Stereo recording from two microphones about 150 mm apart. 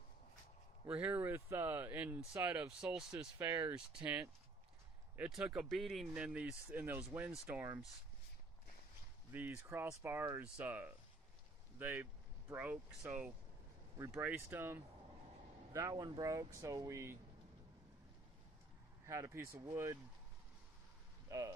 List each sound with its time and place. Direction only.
0.9 s speech: 10° right (ahead or behind)
3.3 s speech: 15° right (ahead or behind)
9.3 s speech: 15° right (ahead or behind)
15.7 s speech: 25° right (ahead or behind)
19.0 s speech: 20° right (ahead or behind)
21.2 s speech: 20° right (ahead or behind)